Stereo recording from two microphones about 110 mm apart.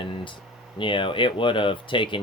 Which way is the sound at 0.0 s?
50° left (ahead or behind).